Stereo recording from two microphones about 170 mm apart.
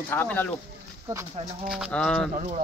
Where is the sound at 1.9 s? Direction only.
5° left (ahead or behind).